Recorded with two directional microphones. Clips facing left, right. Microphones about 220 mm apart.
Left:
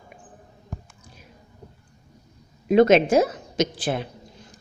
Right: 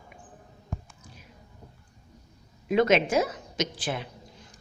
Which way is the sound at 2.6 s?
35° left (ahead or behind).